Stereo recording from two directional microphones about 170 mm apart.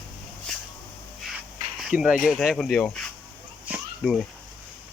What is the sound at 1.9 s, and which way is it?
Speech, 5° right (ahead or behind).